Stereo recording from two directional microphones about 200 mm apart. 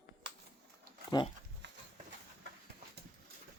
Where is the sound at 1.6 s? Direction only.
60° right (ahead or behind).